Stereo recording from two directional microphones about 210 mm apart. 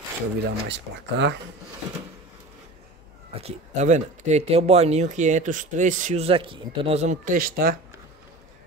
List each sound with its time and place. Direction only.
0.4 s speech: 55° right (ahead or behind)
3.3 s speech: 30° right (ahead or behind)